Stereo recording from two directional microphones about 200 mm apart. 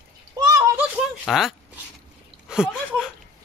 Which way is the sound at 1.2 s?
Centre (ahead or behind).